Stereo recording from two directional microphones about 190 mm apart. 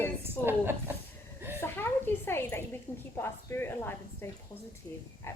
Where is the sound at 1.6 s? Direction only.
10° left (ahead or behind).